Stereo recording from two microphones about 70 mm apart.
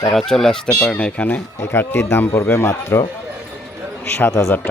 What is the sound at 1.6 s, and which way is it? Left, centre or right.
Speech, left.